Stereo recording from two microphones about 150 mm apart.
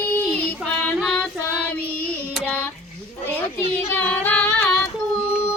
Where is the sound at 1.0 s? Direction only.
Centre (ahead or behind).